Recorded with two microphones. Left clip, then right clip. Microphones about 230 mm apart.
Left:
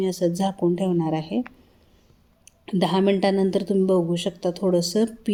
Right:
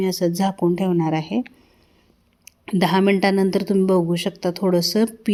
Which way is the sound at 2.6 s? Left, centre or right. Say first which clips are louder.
Right 3 dB; right.